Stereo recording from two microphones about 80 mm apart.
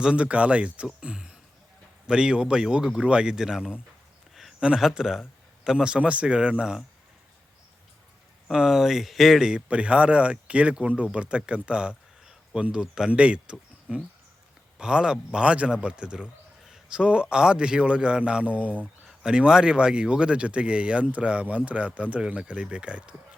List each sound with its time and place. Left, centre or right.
0.0 s speech: centre
8.4 s speech: centre